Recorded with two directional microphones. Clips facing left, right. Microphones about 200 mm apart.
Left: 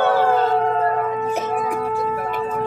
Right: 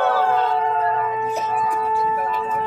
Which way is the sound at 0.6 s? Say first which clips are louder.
Left 2 dB; 50° left (ahead or behind).